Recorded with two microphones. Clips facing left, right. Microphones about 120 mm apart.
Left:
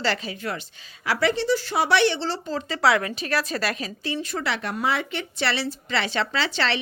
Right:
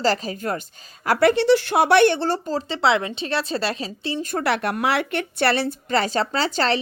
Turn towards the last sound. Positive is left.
turn(degrees=-40)  # may be behind; listen again after turning